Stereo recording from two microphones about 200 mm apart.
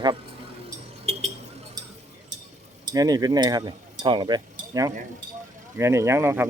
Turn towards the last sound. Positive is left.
turn(degrees=-10)  # may be behind; listen again after turning